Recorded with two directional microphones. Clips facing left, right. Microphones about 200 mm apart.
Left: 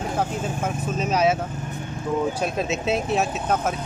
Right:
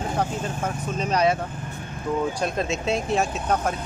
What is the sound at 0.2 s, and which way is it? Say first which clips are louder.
Speech: left 2 dB; 5° left (ahead or behind).